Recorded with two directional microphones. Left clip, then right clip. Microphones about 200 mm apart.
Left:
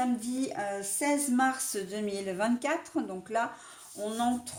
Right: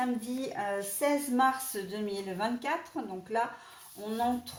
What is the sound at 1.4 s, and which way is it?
Speech, 50° left (ahead or behind).